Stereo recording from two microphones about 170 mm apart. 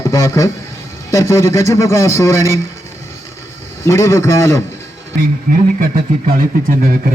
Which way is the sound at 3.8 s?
15° left (ahead or behind).